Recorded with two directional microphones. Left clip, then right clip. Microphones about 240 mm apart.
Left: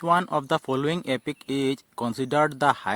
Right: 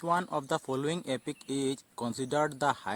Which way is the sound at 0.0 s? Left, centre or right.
Left.